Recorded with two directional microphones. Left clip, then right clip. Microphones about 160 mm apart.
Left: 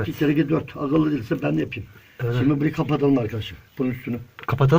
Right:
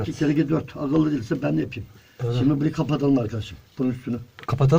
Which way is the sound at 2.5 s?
55° right (ahead or behind).